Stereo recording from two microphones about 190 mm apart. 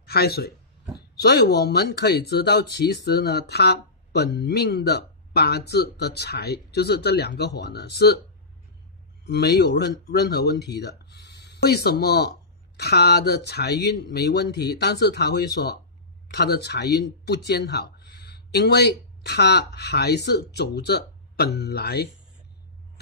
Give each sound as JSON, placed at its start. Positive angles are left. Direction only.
{"t": 0.0, "sound": "speech", "side_deg": 55}
{"t": 9.2, "sound": "speech", "side_deg": 55}